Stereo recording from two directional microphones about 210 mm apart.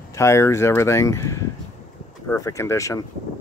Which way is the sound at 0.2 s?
15° left (ahead or behind).